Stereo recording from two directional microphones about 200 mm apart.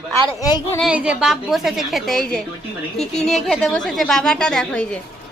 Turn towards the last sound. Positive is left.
turn(degrees=5)  # may be behind; listen again after turning